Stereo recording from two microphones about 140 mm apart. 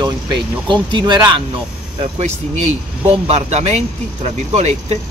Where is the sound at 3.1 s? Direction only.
50° right (ahead or behind).